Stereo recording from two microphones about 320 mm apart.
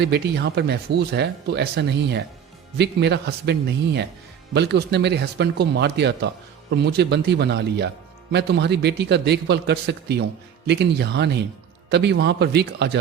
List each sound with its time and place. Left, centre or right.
0.0 s speech: right